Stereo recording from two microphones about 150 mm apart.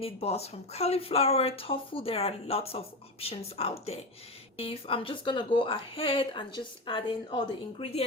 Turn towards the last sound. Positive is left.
turn(degrees=35)  # may be behind; listen again after turning